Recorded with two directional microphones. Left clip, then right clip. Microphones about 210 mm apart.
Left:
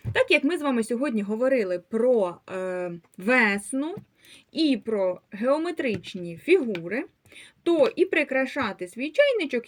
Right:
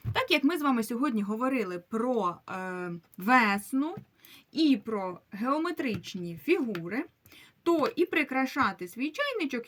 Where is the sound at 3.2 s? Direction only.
30° right (ahead or behind).